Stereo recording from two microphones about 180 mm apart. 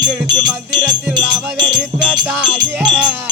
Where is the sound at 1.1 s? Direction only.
25° right (ahead or behind).